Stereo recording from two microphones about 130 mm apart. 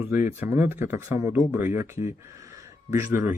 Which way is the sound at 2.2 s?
25° right (ahead or behind).